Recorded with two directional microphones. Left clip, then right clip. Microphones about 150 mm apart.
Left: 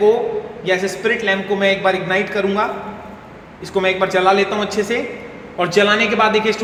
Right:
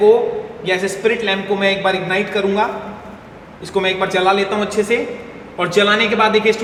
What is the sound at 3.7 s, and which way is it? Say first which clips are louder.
A man's voice: left 1 dB; 15° left (ahead or behind).